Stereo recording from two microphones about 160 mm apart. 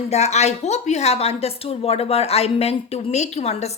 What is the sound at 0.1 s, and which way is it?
Speech, 45° left (ahead or behind).